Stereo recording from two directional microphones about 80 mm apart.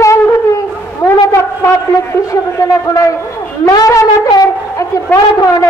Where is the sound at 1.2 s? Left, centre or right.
Left.